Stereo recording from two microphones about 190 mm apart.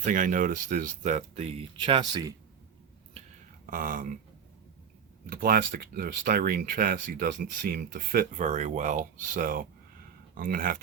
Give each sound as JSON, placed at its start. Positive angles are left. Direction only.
{"t": 0.0, "sound": "speech", "side_deg": -45}
{"t": 3.7, "sound": "speech", "side_deg": -45}
{"t": 5.2, "sound": "speech", "side_deg": -50}